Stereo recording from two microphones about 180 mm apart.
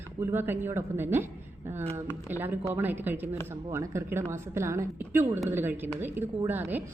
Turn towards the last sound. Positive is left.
turn(degrees=-10)  # may be behind; listen again after turning